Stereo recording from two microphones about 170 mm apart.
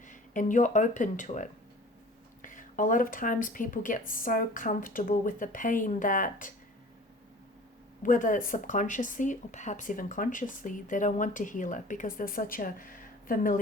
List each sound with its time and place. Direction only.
0.1 s speech: 50° left (ahead or behind)
8.0 s speech: 50° left (ahead or behind)